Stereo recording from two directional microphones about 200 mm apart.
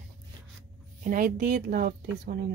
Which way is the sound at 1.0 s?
40° right (ahead or behind).